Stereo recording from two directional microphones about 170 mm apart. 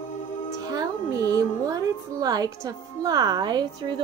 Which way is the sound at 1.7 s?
20° right (ahead or behind).